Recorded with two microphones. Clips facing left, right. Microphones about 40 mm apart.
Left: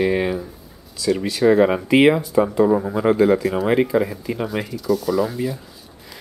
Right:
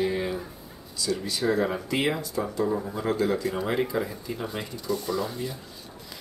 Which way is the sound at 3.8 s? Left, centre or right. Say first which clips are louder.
Left 9 dB; left.